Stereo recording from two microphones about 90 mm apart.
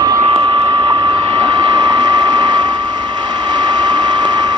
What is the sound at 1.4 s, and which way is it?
Hair dryer, 50° right (ahead or behind).